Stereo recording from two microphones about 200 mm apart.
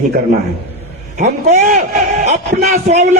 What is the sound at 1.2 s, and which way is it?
A man's voice, 35° right (ahead or behind).